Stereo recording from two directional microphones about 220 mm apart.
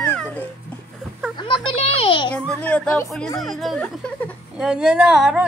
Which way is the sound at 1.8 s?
25° left (ahead or behind).